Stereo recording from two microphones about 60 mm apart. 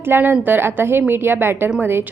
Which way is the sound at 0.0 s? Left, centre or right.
Right.